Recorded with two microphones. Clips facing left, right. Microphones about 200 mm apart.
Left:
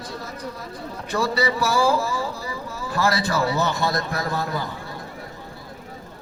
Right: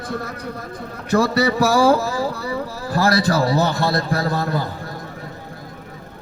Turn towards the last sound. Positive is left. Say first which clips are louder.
# right 4 dB
turn(degrees=-40)  # may be behind; listen again after turning